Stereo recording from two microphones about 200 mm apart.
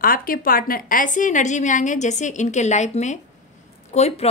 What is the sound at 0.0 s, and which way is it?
A woman's voice, 45° left (ahead or behind).